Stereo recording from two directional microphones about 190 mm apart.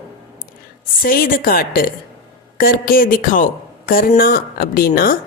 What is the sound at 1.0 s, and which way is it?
A woman's voice, 50° left (ahead or behind).